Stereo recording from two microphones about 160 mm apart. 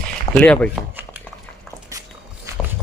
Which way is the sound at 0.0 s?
5° left (ahead or behind).